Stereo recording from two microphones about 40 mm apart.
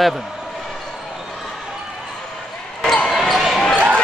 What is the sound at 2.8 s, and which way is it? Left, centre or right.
Basketball bounce, centre.